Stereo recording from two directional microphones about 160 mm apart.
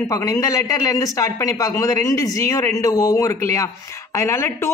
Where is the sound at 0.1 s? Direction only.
20° left (ahead or behind).